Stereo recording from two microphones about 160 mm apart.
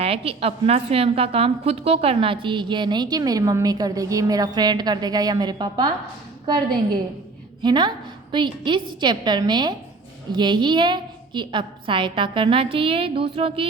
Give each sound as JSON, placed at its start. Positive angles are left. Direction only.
{"t": 0.0, "sound": "a woman's voice", "side_deg": -40}
{"t": 7.6, "sound": "a woman's voice", "side_deg": -30}